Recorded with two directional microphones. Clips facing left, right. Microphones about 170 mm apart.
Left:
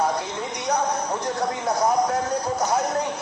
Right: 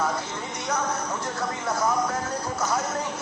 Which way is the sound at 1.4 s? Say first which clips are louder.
Left 4 dB; 35° left (ahead or behind).